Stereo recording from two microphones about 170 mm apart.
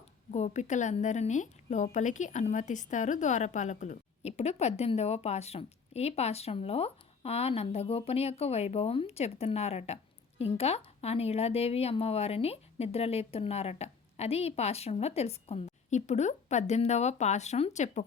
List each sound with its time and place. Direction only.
0.3 s a woman's voice: 45° left (ahead or behind)